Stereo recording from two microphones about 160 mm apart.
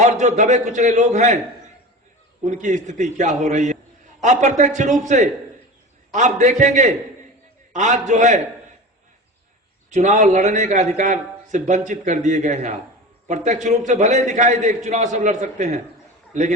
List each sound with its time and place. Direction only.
0.0 s a man's voice: 50° right (ahead or behind)
2.4 s a man's voice: 50° right (ahead or behind)
9.9 s a man's voice: 50° right (ahead or behind)